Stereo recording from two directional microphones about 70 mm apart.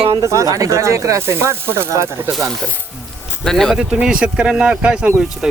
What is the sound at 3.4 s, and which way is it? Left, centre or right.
Speech, centre.